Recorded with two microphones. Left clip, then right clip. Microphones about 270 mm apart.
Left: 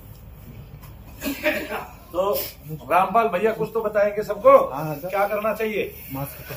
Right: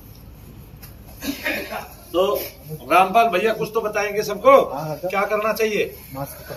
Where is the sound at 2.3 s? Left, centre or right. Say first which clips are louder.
Right 2 dB; centre.